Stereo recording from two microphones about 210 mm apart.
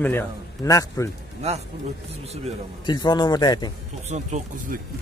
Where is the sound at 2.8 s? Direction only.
20° left (ahead or behind).